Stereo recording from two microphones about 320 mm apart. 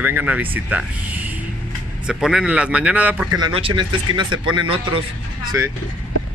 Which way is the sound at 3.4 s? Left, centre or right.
Centre.